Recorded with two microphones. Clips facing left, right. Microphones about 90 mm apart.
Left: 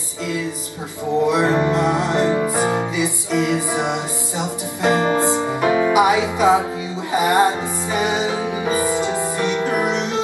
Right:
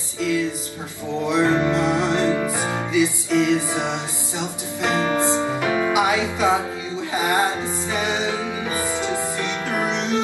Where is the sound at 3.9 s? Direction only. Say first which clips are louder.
Left 4 dB; 15° left (ahead or behind).